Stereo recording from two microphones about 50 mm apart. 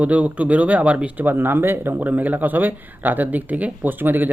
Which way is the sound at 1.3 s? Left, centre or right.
Right.